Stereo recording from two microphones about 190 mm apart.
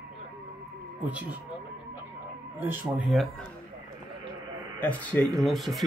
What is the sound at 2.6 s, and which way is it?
Speech, 10° right (ahead or behind).